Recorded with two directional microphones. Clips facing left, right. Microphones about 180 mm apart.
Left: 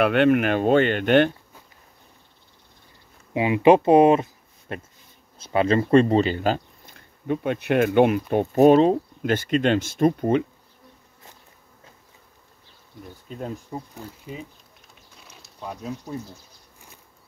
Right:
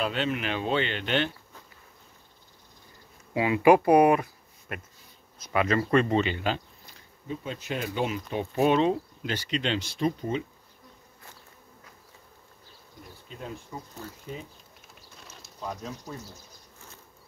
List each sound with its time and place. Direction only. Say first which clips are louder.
0.0 s speech: left 11 dB; 60° left (ahead or behind)
3.3 s speech: left 4 dB; 20° left (ahead or behind); by 8.2 s 60° left (ahead or behind)
8.3 s speech: left 5 dB; 45° left (ahead or behind)
13.3 s speech: left 7 dB; 45° left (ahead or behind)
13.9 s speech: left 2 dB; 10° left (ahead or behind)
15.1 s bird: left 1 dB; centre (ahead or behind)